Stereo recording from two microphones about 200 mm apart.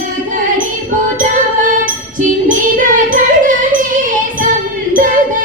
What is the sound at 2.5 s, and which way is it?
Child singing, 40° right (ahead or behind).